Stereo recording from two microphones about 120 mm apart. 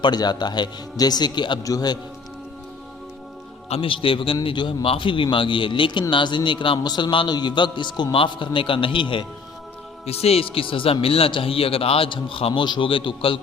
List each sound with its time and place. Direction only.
0.0 s a man's voice: 35° left (ahead or behind)
3.7 s a man's voice: 50° left (ahead or behind)
10.1 s a man's voice: 55° left (ahead or behind)